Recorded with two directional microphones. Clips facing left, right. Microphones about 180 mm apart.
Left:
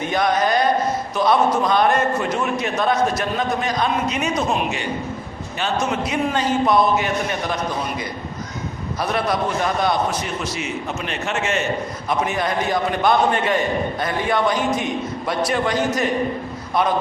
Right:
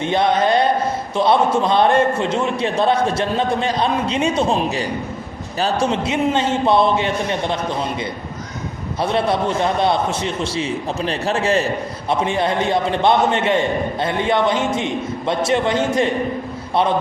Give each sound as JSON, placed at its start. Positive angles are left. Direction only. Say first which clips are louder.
{"t": 0.0, "sound": "a man's voice", "louder": "right 3 dB", "side_deg": -25}
{"t": 9.0, "sound": "a man's voice", "louder": "right 3 dB", "side_deg": -25}